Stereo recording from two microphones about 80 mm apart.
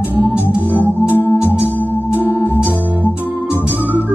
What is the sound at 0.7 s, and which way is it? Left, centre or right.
Organ, right.